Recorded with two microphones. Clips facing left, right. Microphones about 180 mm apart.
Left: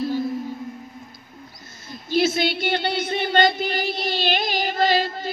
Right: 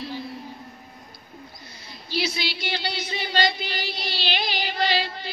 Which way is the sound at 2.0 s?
50° left (ahead or behind).